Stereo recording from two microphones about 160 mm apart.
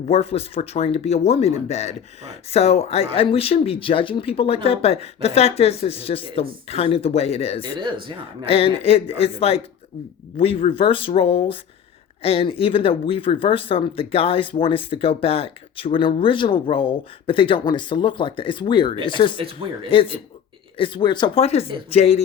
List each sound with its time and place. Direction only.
0.1 s speech: 40° left (ahead or behind)
7.6 s speech: 30° right (ahead or behind)
8.4 s speech: 35° left (ahead or behind)